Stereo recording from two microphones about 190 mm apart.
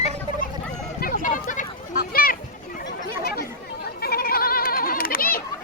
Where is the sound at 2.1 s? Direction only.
50° left (ahead or behind).